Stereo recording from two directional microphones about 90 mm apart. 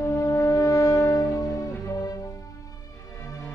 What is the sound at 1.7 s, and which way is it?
Music, 40° left (ahead or behind).